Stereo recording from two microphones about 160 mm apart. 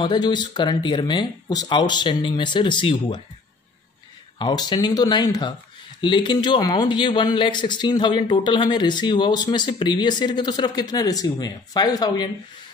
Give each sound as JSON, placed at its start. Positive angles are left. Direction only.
{"t": 0.0, "sound": "a man's voice", "side_deg": 25}
{"t": 4.4, "sound": "a man's voice", "side_deg": 30}